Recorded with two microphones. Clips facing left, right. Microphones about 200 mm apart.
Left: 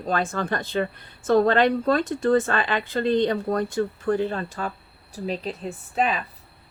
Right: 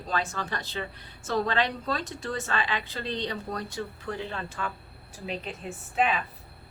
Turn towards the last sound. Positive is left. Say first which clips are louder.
# left 2 dB
turn(degrees=40)  # may be behind; listen again after turning